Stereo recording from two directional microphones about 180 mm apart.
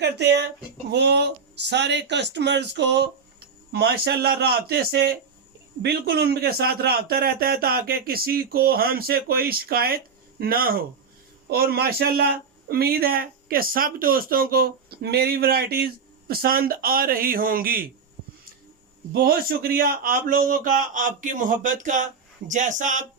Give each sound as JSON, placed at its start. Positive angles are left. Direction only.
{"t": 0.0, "sound": "speech", "side_deg": -70}
{"t": 19.1, "sound": "a man's voice", "side_deg": -55}